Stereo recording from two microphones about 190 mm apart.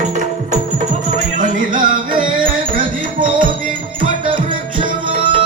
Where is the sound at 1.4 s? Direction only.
45° right (ahead or behind).